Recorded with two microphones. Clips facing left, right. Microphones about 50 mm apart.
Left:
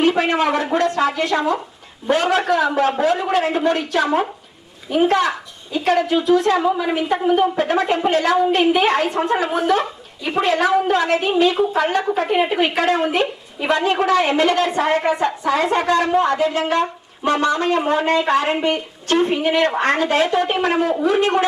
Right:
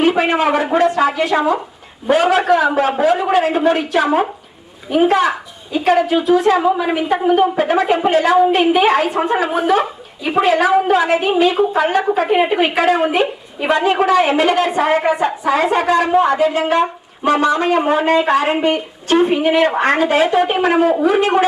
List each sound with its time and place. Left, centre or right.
0.0 s a woman's voice: centre